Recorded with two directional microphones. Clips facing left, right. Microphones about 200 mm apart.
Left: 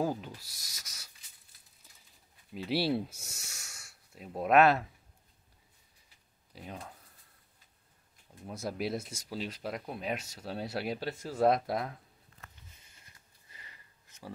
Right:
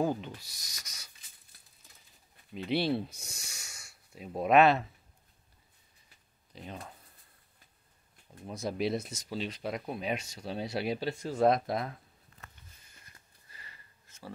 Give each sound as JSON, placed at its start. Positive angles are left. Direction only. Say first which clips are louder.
{"t": 0.0, "sound": "speech", "louder": "right 2 dB", "side_deg": 5}
{"t": 2.5, "sound": "speech", "louder": "right 1 dB", "side_deg": 5}
{"t": 6.5, "sound": "speech", "louder": "right 1 dB", "side_deg": 10}
{"t": 8.5, "sound": "speech", "louder": "right 3 dB", "side_deg": 5}
{"t": 13.5, "sound": "sniff", "louder": "right 1 dB", "side_deg": 15}